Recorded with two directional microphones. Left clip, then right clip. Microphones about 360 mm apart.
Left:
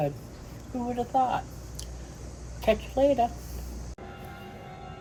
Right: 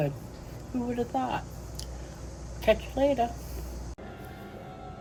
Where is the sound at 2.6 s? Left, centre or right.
Centre.